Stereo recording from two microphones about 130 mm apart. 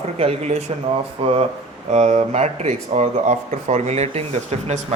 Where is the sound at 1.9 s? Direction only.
60° right (ahead or behind).